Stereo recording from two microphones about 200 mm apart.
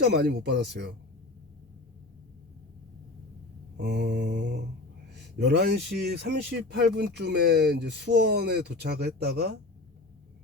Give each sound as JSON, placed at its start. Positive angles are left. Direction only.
{"t": 0.0, "sound": "speech", "side_deg": -55}
{"t": 3.8, "sound": "speech", "side_deg": -55}